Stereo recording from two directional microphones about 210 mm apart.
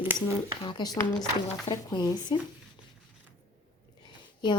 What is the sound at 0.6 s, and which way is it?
Speech, 20° left (ahead or behind).